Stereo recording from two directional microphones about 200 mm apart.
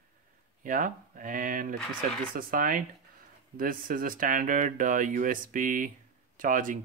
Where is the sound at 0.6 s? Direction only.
40° right (ahead or behind).